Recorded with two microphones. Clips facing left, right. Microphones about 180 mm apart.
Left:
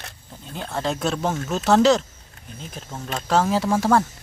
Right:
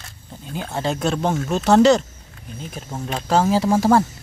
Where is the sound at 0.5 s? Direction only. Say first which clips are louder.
Right 2 dB; 5° right (ahead or behind).